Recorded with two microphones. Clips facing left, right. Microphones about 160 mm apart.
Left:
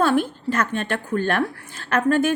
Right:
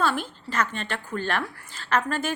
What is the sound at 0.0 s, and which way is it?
A woman's voice, 55° left (ahead or behind).